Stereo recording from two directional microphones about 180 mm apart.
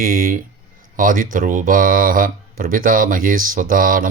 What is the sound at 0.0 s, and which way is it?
Speech, 50° right (ahead or behind).